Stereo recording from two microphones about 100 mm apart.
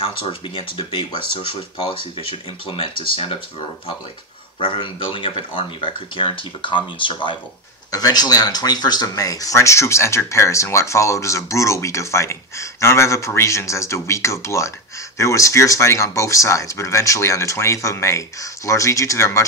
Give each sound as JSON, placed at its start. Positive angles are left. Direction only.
{"t": 0.0, "sound": "speech", "side_deg": 60}
{"t": 4.6, "sound": "speech", "side_deg": 60}
{"t": 7.9, "sound": "speech", "side_deg": 40}